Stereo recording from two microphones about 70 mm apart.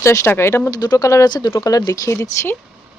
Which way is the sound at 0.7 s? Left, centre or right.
Left.